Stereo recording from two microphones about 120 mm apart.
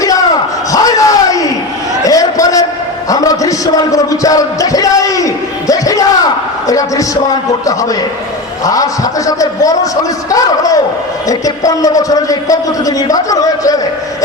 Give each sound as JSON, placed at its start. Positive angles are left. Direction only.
{"t": 0.7, "sound": "a sound", "side_deg": 30}
{"t": 3.1, "sound": "music", "side_deg": 30}
{"t": 7.6, "sound": "a man's voice", "side_deg": 30}